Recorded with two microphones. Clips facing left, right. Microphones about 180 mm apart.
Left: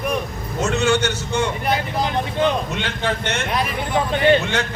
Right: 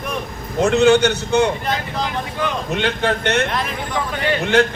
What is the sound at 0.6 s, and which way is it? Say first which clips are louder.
Speech: right 6 dB; 60° right (ahead or behind).